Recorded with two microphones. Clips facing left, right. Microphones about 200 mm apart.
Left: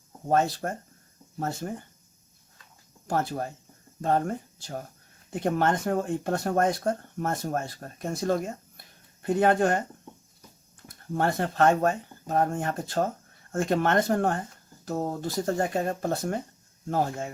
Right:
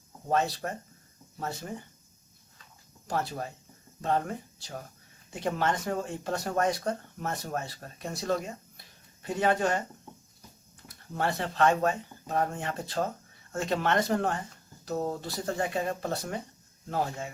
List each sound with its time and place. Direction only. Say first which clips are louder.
0.3 s speech: left 4 dB; 50° left (ahead or behind)
3.1 s speech: left 4 dB; 45° left (ahead or behind)
10.8 s speech: left 4 dB; 45° left (ahead or behind)